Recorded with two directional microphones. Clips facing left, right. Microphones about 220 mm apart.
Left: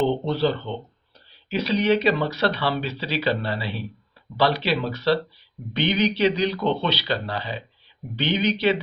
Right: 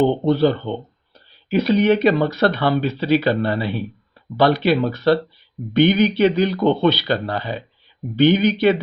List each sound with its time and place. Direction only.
0.0 s speech: 50° right (ahead or behind)